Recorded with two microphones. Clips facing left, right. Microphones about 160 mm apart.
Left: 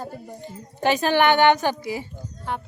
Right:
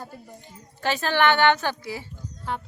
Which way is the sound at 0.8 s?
15° left (ahead or behind).